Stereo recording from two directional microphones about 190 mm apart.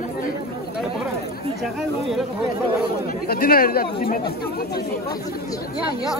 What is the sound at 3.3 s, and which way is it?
Speech, 50° left (ahead or behind).